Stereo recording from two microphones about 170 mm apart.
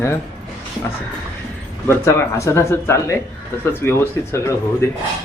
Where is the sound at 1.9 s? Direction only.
15° left (ahead or behind).